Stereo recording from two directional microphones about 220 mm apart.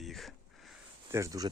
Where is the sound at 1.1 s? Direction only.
15° right (ahead or behind).